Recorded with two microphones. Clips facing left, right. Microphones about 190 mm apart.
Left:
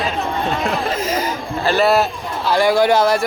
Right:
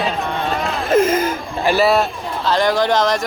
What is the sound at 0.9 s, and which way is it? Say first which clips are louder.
Speech: right 6 dB; 50° right (ahead or behind).